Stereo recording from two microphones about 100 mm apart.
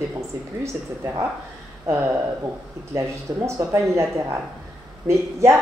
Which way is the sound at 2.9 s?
30° right (ahead or behind).